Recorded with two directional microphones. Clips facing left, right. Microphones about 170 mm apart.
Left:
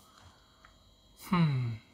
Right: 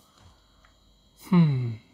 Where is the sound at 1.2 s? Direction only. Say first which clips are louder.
Right 8 dB; 25° right (ahead or behind).